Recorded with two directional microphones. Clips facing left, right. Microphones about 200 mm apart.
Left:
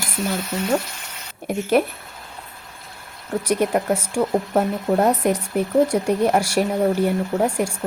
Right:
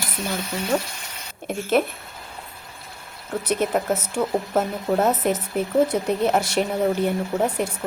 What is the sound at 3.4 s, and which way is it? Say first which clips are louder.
Speech: left 2 dB; 10° left (ahead or behind).